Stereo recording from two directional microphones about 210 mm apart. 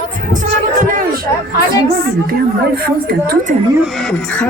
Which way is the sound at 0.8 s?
40° right (ahead or behind).